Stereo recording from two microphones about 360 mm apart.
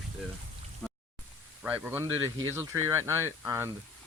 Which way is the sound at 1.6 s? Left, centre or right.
Centre.